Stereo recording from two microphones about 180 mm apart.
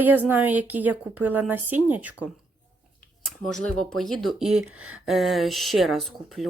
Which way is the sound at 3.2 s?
Centre (ahead or behind).